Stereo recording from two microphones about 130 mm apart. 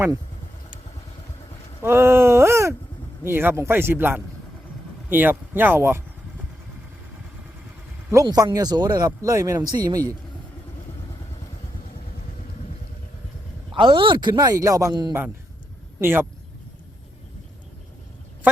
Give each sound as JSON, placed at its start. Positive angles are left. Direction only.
{"t": 1.8, "sound": "wail", "side_deg": -20}
{"t": 3.2, "sound": "speech", "side_deg": -20}
{"t": 8.1, "sound": "speech", "side_deg": -30}
{"t": 13.7, "sound": "speech", "side_deg": -40}
{"t": 16.0, "sound": "speech", "side_deg": -15}